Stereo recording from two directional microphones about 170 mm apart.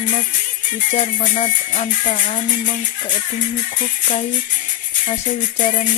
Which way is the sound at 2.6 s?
45° left (ahead or behind).